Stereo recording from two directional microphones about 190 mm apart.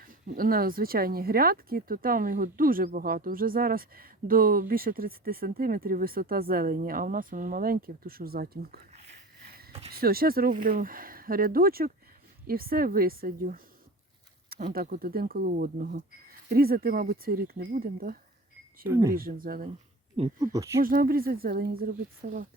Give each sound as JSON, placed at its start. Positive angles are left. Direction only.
{"t": 0.0, "sound": "speech", "side_deg": -45}
{"t": 9.9, "sound": "speech", "side_deg": -50}
{"t": 18.9, "sound": "speech", "side_deg": -15}
{"t": 19.1, "sound": "speech", "side_deg": -50}
{"t": 20.4, "sound": "speech", "side_deg": -15}
{"t": 20.8, "sound": "speech", "side_deg": -50}